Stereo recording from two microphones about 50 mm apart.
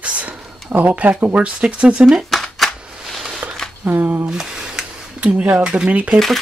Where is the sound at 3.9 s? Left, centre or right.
Right.